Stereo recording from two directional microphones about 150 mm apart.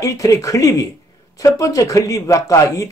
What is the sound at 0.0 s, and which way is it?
Speech, 20° left (ahead or behind).